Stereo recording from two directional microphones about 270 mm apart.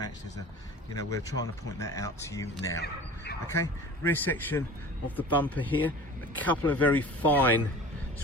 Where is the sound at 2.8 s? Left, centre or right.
Left.